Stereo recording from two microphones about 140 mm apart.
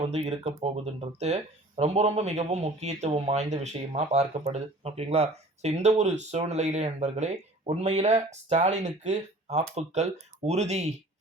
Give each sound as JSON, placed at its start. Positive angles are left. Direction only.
{"t": 0.1, "sound": "speech", "side_deg": -50}